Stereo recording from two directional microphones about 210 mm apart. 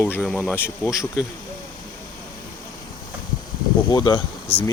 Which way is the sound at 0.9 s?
5° right (ahead or behind).